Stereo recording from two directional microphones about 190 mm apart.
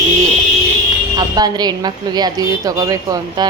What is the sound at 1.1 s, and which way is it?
A woman's voice, 20° right (ahead or behind).